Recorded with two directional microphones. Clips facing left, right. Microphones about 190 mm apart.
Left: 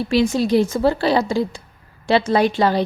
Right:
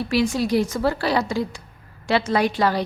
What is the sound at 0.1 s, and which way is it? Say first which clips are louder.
A woman's voice: left 4 dB; 25° left (ahead or behind).